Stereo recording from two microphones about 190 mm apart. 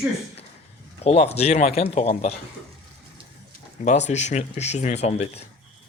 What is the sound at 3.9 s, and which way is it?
Speech, 35° left (ahead or behind).